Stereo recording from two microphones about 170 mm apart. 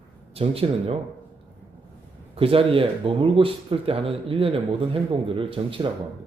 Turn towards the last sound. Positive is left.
turn(degrees=-30)  # may be behind; listen again after turning